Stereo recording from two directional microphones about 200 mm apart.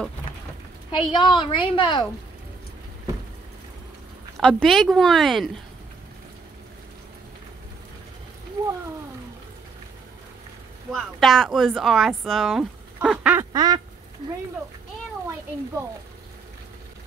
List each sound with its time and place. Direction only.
0.9 s a woman's voice: 25° left (ahead or behind)
4.4 s speech: 5° left (ahead or behind)
10.9 s speech: centre (ahead or behind)
13.5 s quack: 20° right (ahead or behind)